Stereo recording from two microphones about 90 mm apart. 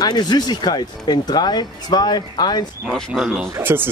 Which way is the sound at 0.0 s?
50° left (ahead or behind).